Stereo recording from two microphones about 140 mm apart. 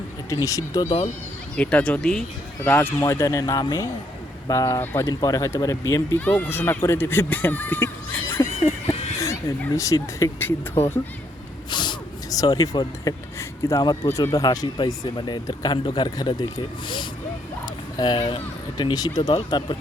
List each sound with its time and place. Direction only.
0.3 s speech: 25° left (ahead or behind)
1.5 s speech: 10° left (ahead or behind)
3.0 s speech: 20° left (ahead or behind)
8.3 s a sound: 15° left (ahead or behind)
9.2 s speech: 20° left (ahead or behind)
11.7 s a sound: 30° left (ahead or behind)
13.7 s speech: 25° left (ahead or behind)